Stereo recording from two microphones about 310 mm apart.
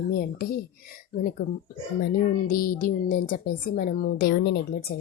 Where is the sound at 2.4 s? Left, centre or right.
Left.